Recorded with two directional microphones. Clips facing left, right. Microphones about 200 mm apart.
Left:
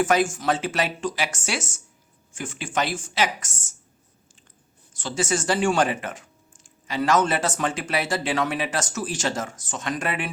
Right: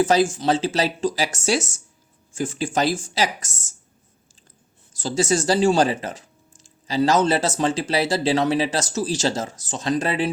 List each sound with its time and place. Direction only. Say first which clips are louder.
0.1 s speech: right 3 dB; 35° right (ahead or behind)
4.9 s speech: right 5 dB; 35° right (ahead or behind)